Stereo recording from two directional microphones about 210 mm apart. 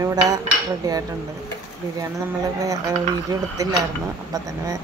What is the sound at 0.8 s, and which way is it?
Speech, 15° right (ahead or behind).